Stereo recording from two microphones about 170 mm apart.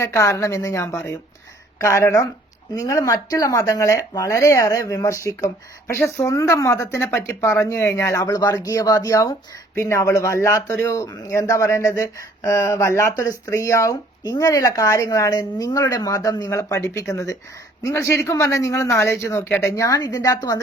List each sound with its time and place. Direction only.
0.0 s speech: 15° left (ahead or behind)